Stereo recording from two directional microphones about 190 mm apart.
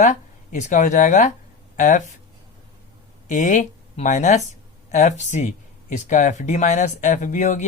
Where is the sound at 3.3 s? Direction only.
40° left (ahead or behind).